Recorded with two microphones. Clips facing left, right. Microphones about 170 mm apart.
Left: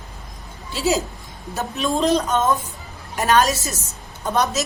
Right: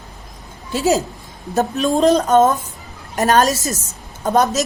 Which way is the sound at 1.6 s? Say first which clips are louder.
Right 6 dB; 45° right (ahead or behind).